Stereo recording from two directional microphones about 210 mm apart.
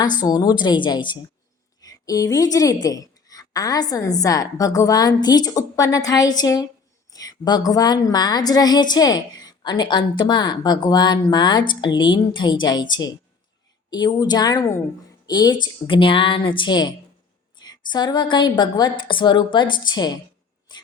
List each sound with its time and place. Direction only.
0.3 s a woman's voice: 20° left (ahead or behind)